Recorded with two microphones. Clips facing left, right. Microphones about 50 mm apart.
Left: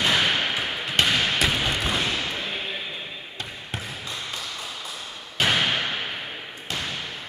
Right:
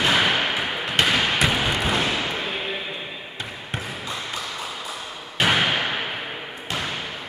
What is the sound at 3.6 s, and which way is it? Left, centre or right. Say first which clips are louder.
Basketball bounce: right 4 dB; centre.